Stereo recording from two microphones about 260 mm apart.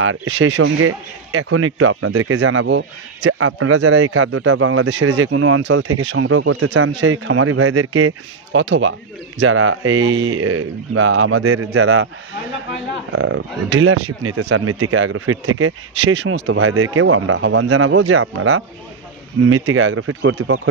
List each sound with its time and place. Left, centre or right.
0.0 s a man's voice: right
13.1 s a man's voice: right